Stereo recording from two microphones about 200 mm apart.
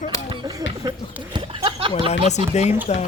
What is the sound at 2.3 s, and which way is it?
Speech, 35° left (ahead or behind).